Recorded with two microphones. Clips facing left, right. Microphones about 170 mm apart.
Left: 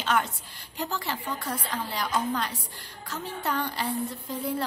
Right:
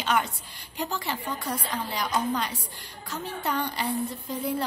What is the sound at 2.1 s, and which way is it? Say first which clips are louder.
Speech: right 1 dB; 15° right (ahead or behind).